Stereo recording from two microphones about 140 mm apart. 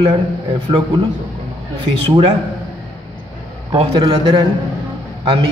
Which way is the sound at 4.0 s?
30° right (ahead or behind).